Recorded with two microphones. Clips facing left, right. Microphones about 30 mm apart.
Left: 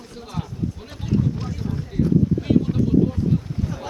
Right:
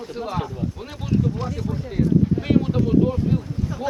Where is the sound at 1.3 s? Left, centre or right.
Centre.